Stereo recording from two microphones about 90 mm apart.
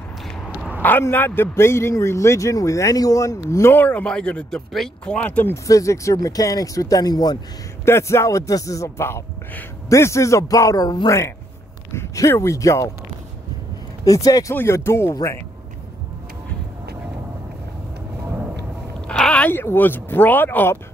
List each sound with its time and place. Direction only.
1.0 s a man's voice: 25° left (ahead or behind)
3.8 s speech: 15° left (ahead or behind)
5.5 s a man's voice: 35° left (ahead or behind)
7.8 s a man's voice: 30° left (ahead or behind); by 11.1 s 45° left (ahead or behind)
11.9 s a man's voice: 30° left (ahead or behind)
14.0 s a man's voice: 40° left (ahead or behind)
14.5 s speech: 25° left (ahead or behind)
19.0 s a sound: 10° left (ahead or behind)
19.5 s speech: 25° left (ahead or behind)